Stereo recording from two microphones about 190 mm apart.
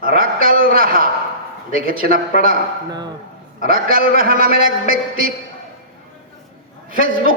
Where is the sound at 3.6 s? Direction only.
50° right (ahead or behind).